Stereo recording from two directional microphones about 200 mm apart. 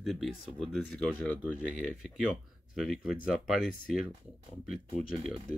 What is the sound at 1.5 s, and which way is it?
Speech, 5° right (ahead or behind).